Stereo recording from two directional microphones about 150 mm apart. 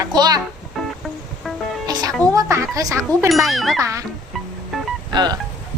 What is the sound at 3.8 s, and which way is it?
Speech, 20° right (ahead or behind).